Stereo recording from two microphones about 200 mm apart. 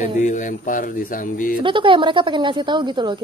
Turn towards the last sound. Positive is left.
turn(degrees=-20)  # may be behind; listen again after turning